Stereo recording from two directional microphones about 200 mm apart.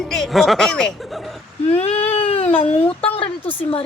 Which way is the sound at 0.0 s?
Centre (ahead or behind).